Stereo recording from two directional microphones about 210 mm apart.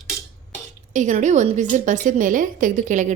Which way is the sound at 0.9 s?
35° right (ahead or behind).